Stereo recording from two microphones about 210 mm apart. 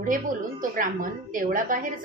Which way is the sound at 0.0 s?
40° right (ahead or behind).